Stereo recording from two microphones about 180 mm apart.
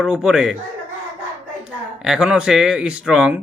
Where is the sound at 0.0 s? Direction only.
5° right (ahead or behind).